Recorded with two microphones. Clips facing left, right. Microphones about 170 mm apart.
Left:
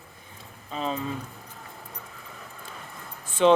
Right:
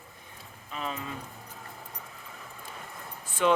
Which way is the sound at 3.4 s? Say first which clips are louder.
Left 6 dB; 25° left (ahead or behind).